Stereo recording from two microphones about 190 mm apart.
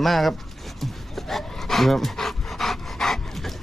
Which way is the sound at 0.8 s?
Centre (ahead or behind).